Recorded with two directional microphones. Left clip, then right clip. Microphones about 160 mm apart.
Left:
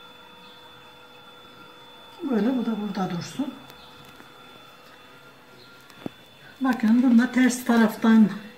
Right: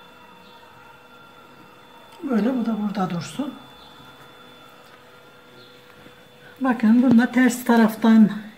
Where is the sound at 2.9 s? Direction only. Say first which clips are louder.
Right 3 dB; 50° right (ahead or behind).